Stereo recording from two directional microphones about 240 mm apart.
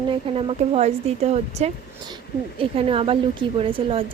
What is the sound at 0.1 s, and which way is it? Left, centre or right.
A woman's voice, right.